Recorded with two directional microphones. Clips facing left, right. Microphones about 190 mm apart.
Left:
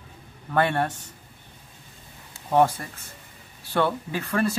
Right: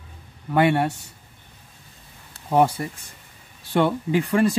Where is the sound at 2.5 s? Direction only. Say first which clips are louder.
Right 1 dB; 10° right (ahead or behind).